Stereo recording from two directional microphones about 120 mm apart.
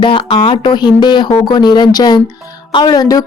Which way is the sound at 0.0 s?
45° left (ahead or behind).